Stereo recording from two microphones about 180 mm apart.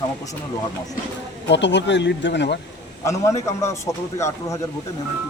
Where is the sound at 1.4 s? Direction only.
75° left (ahead or behind).